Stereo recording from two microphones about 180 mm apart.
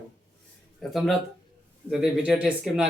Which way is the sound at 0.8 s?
Centre (ahead or behind).